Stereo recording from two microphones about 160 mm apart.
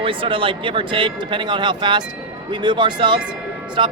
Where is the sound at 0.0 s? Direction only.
35° right (ahead or behind).